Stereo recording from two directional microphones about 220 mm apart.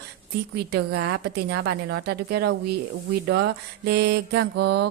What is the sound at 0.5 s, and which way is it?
A woman's voice, 45° right (ahead or behind).